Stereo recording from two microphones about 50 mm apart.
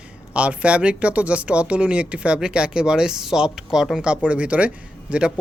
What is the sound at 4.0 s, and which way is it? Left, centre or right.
Speech, right.